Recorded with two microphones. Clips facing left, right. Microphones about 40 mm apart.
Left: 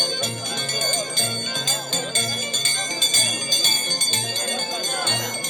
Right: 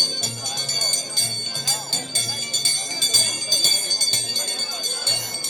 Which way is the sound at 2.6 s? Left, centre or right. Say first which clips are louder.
Left 2 dB; left.